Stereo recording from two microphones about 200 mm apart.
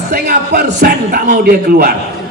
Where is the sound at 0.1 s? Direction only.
50° right (ahead or behind).